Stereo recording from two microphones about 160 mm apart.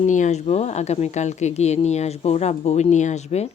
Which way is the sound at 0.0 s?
50° left (ahead or behind).